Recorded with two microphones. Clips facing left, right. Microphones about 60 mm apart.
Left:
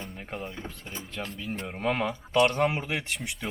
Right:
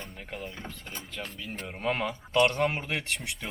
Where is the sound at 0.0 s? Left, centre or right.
Centre.